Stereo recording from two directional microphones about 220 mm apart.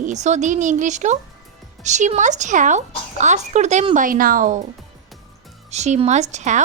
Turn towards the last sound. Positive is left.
turn(degrees=-30)  # may be behind; listen again after turning